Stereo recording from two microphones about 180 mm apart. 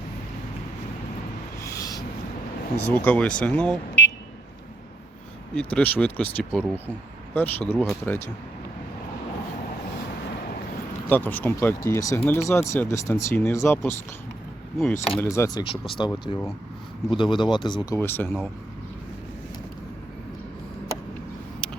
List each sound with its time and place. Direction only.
1.6 s a sound: 20° left (ahead or behind)
2.7 s speech: 10° left (ahead or behind)
5.5 s speech: 5° left (ahead or behind)
11.1 s speech: 10° left (ahead or behind)